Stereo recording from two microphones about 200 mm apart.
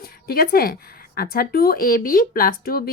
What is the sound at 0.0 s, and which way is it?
Speech, 50° left (ahead or behind).